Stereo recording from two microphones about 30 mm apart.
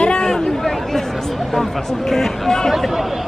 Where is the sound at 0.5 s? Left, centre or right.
Centre.